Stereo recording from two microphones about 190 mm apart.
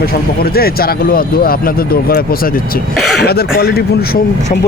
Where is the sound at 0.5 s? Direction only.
55° left (ahead or behind).